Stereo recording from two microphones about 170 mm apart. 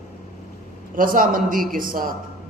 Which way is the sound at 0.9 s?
55° right (ahead or behind).